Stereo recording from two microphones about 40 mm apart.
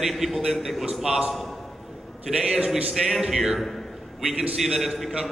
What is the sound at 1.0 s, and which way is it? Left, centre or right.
Speech, centre.